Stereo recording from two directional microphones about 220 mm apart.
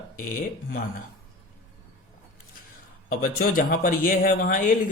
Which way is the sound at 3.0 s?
40° left (ahead or behind).